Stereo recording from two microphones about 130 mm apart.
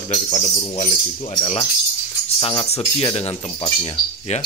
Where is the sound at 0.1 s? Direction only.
60° left (ahead or behind).